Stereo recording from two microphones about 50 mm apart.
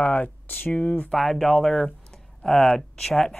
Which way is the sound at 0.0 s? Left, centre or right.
Left.